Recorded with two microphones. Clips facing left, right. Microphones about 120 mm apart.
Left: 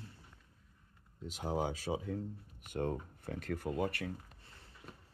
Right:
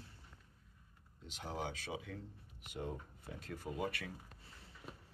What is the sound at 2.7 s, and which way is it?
Speech, 60° left (ahead or behind).